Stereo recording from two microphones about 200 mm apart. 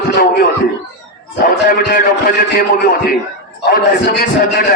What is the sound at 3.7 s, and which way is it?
Speech, 45° left (ahead or behind).